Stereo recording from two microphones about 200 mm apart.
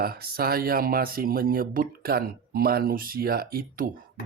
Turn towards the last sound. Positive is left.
turn(degrees=-45)  # may be behind; listen again after turning